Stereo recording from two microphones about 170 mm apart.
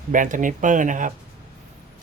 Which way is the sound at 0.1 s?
50° right (ahead or behind).